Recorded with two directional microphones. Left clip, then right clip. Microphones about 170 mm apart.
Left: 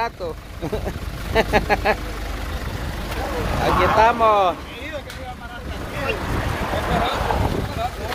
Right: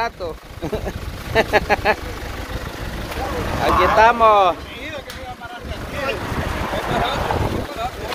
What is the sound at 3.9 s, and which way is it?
Speech, 5° right (ahead or behind).